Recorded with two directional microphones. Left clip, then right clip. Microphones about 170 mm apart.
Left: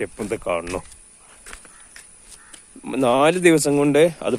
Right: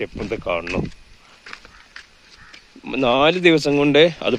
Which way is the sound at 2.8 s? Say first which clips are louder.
Right 1 dB; 10° left (ahead or behind).